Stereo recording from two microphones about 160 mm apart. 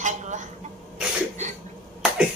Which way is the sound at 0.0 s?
50° right (ahead or behind).